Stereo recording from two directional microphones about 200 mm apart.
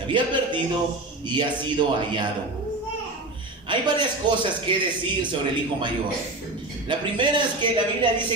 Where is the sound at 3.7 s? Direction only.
25° right (ahead or behind).